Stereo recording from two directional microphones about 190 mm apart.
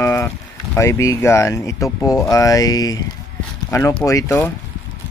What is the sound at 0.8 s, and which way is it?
Speech, 15° left (ahead or behind).